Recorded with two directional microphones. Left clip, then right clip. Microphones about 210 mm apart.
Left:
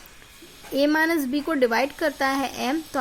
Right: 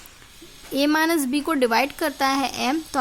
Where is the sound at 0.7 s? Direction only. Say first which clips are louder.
Right 1 dB; 35° right (ahead or behind).